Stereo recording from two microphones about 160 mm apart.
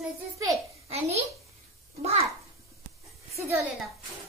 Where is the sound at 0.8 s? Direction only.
40° right (ahead or behind).